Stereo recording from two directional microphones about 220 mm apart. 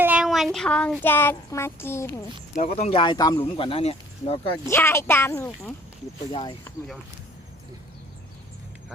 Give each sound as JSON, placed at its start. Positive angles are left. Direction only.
{"t": 0.0, "sound": "a sound", "side_deg": -5}
{"t": 1.0, "sound": "speech", "side_deg": 10}
{"t": 2.6, "sound": "speech", "side_deg": 30}
{"t": 4.5, "sound": "speech", "side_deg": 15}